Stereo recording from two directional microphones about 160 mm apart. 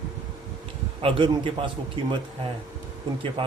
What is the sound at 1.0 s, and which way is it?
Speech, 35° right (ahead or behind).